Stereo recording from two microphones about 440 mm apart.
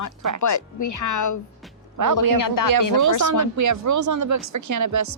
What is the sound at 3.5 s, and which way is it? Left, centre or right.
Speech, right.